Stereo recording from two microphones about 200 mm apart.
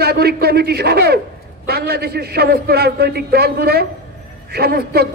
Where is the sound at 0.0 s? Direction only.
50° right (ahead or behind).